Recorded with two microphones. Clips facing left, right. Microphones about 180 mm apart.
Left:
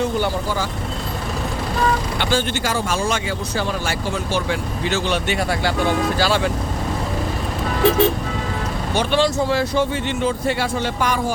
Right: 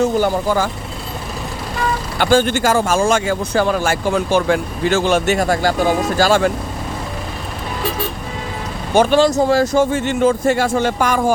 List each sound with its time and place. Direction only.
0.0 s speech: 45° right (ahead or behind)
2.1 s speech: 45° right (ahead or behind)
8.9 s speech: 45° right (ahead or behind)